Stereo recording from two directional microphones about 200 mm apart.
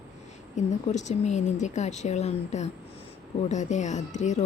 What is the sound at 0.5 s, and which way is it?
A woman's voice, 35° left (ahead or behind).